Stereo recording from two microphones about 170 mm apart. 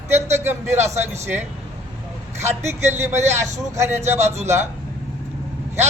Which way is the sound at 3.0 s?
15° right (ahead or behind).